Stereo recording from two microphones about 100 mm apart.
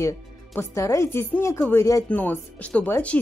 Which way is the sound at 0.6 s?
30° left (ahead or behind).